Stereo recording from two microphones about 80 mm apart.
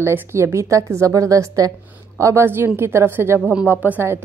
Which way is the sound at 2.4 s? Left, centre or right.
Right.